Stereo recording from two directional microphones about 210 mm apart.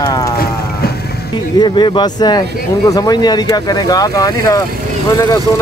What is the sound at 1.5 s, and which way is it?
Speech, 20° left (ahead or behind).